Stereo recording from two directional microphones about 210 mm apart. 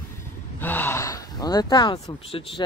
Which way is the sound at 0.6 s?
10° left (ahead or behind).